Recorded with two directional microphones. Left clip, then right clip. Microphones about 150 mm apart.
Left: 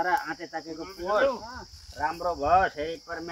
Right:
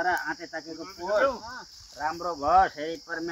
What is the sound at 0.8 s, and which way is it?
Speech, 30° right (ahead or behind).